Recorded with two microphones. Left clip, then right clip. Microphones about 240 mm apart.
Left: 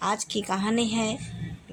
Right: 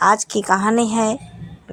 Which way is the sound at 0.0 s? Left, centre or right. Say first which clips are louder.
Right 12 dB; right.